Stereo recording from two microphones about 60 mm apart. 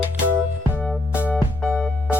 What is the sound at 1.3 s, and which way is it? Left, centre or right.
Music, centre.